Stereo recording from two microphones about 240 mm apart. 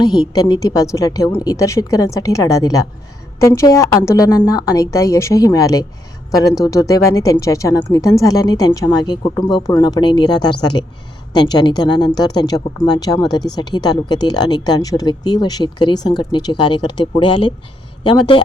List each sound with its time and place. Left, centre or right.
0.0 s speech: centre